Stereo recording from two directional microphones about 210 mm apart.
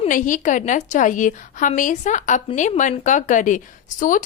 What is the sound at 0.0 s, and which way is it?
Speech, 40° left (ahead or behind).